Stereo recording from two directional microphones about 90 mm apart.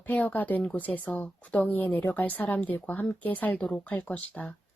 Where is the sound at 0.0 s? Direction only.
20° left (ahead or behind).